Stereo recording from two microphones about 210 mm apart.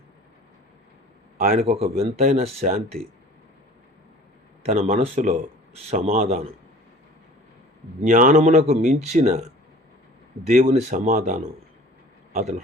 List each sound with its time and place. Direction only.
1.4 s a man's voice: 40° right (ahead or behind)
1.6 s speech: 30° right (ahead or behind)
4.6 s speech: 30° right (ahead or behind)
8.0 s speech: 40° right (ahead or behind)
10.6 s speech: 30° right (ahead or behind)